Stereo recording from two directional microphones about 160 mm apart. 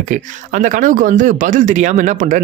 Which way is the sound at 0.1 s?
50° right (ahead or behind).